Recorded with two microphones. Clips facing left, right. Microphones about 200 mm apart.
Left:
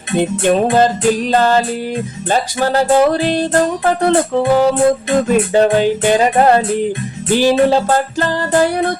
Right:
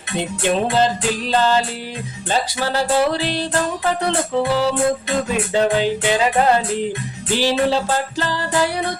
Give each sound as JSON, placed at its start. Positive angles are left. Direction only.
{"t": 0.2, "sound": "music", "side_deg": 45}